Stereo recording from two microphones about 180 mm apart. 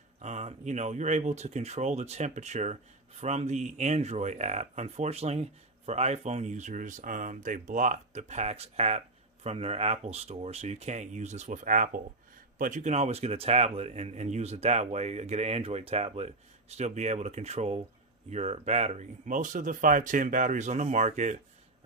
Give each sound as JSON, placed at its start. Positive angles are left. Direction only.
{"t": 0.2, "sound": "speech", "side_deg": -40}